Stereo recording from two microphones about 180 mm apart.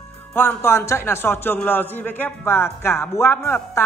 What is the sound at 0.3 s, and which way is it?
A man's voice, 10° left (ahead or behind).